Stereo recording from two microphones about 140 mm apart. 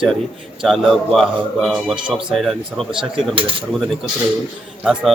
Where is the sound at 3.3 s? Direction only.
40° right (ahead or behind).